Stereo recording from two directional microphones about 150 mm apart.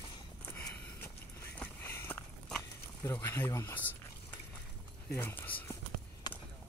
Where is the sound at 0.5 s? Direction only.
15° left (ahead or behind).